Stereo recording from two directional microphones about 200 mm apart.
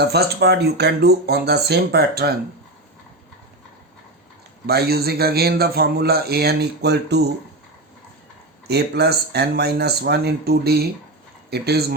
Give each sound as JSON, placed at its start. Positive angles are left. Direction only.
{"t": 0.0, "sound": "a man's voice", "side_deg": -55}
{"t": 4.6, "sound": "a man's voice", "side_deg": -50}
{"t": 8.6, "sound": "a man's voice", "side_deg": -55}